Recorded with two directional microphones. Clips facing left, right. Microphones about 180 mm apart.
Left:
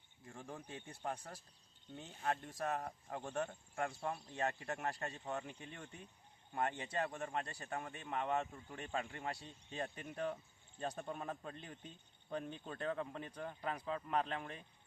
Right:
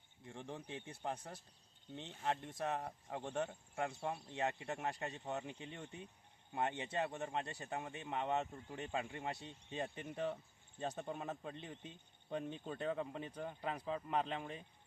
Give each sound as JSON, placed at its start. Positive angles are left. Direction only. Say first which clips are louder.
{"t": 0.3, "sound": "speech", "louder": "right 2 dB", "side_deg": 0}
{"t": 0.7, "sound": "speech", "louder": "even", "side_deg": -20}
{"t": 1.1, "sound": "speech", "louder": "right 1 dB", "side_deg": 0}
{"t": 2.0, "sound": "speech", "louder": "even", "side_deg": -20}
{"t": 9.7, "sound": "speech", "louder": "right 1 dB", "side_deg": -5}